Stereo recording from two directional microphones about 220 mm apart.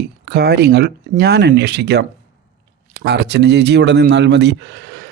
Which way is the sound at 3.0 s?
50° right (ahead or behind).